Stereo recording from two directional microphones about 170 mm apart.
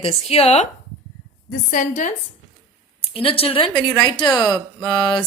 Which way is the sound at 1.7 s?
50° left (ahead or behind).